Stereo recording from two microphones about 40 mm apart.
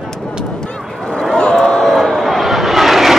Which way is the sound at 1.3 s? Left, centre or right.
Centre.